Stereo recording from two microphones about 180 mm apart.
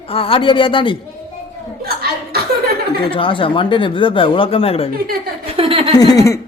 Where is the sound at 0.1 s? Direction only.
30° left (ahead or behind).